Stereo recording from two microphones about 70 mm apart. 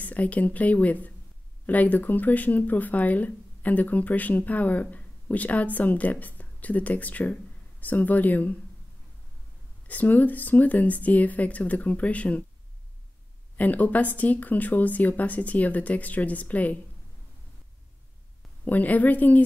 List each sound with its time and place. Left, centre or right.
0.0 s speech: left
9.8 s speech: left
13.6 s speech: left
18.7 s speech: left